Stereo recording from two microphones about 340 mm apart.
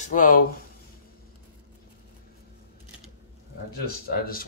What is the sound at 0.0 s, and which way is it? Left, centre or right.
Speech, left.